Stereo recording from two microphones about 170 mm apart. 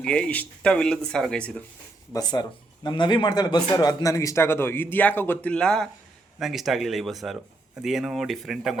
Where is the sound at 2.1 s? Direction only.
25° left (ahead or behind); by 8.8 s centre (ahead or behind).